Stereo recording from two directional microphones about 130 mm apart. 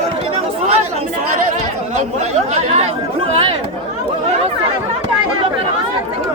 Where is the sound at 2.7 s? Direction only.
55° right (ahead or behind).